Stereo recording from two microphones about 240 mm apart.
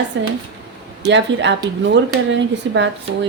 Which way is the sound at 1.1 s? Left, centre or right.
Right.